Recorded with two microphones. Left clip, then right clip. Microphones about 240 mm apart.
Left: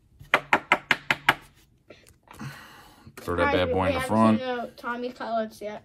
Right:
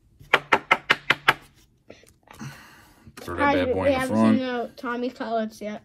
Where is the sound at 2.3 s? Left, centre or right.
Centre.